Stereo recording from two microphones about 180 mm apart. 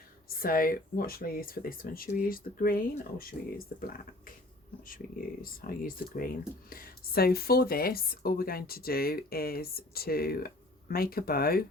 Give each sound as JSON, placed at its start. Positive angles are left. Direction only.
{"t": 0.3, "sound": "speech", "side_deg": 50}